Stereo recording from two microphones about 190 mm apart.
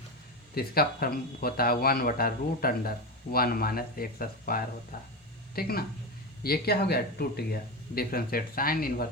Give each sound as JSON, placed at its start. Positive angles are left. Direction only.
{"t": 0.5, "sound": "speech", "side_deg": 50}